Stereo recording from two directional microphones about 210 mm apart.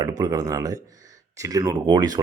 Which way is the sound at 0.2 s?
15° right (ahead or behind).